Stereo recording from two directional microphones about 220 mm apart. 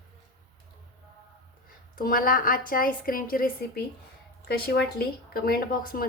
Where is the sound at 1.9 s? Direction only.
40° left (ahead or behind).